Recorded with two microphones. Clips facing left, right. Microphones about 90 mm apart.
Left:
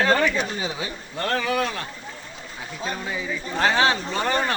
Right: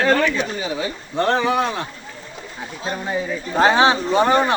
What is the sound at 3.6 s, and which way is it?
Speech, 25° right (ahead or behind).